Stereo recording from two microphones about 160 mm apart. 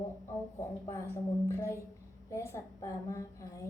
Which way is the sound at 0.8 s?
15° left (ahead or behind).